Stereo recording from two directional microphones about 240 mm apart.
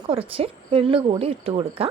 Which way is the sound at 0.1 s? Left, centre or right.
Right.